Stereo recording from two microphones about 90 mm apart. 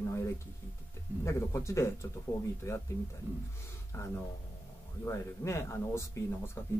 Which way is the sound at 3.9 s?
30° left (ahead or behind).